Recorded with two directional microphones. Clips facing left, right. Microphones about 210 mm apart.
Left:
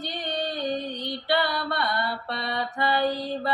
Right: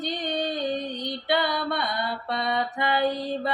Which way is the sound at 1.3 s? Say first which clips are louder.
Right 1 dB; 20° right (ahead or behind).